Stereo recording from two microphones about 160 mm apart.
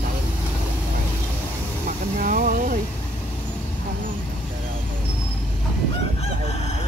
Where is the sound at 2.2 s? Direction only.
60° right (ahead or behind).